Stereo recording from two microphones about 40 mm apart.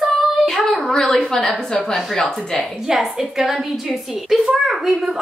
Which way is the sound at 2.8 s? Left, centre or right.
Centre.